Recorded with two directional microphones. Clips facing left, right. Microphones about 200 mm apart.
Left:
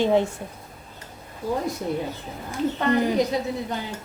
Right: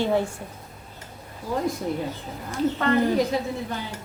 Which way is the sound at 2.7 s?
15° left (ahead or behind).